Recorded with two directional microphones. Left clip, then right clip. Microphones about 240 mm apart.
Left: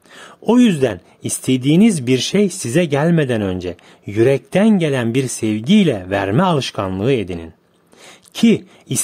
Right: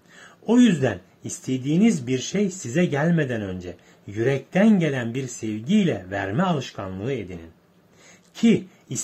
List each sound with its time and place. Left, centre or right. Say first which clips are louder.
0.1 s speech: left 6 dB; left